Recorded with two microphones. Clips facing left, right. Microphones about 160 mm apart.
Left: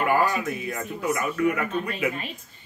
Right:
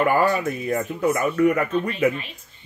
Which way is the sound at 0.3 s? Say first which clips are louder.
Right 6 dB; 40° right (ahead or behind).